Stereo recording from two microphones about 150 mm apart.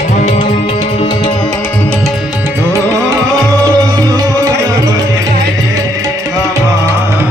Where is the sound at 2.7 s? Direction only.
20° right (ahead or behind).